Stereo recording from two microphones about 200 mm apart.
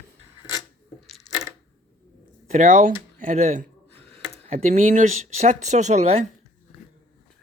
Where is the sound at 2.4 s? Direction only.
40° right (ahead or behind).